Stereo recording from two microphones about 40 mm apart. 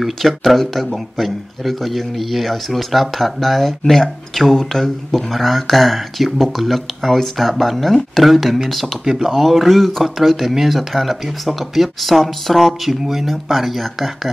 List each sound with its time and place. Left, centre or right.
0.0 s speech: centre